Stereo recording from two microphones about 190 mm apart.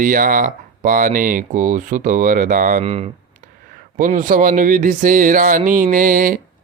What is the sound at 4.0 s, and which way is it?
Speech, 45° right (ahead or behind).